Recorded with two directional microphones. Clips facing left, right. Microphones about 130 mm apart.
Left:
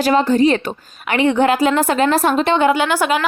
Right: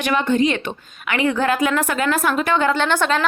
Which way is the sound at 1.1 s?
25° left (ahead or behind).